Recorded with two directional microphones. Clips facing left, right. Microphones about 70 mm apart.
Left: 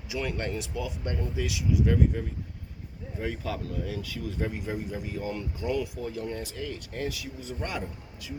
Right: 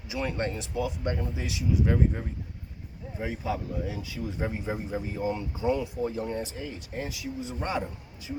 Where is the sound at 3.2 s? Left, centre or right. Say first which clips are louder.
Right 1 dB; centre.